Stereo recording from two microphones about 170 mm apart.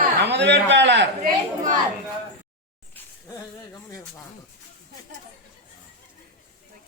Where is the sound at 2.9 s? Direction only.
20° left (ahead or behind).